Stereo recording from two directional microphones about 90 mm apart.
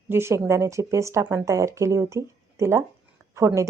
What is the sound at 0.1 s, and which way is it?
A woman's voice, 30° right (ahead or behind).